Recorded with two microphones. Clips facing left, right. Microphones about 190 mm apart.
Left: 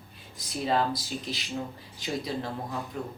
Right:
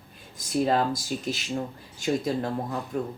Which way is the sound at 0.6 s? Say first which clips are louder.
Right 1 dB; 45° right (ahead or behind).